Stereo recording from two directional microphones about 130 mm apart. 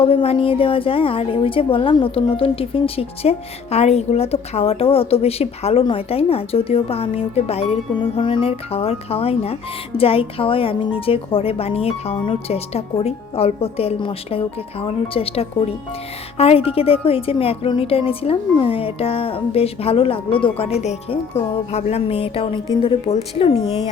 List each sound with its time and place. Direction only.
0.0 s speech: 50° left (ahead or behind)